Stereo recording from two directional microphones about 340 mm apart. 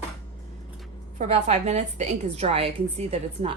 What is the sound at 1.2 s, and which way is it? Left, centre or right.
A woman's voice, centre.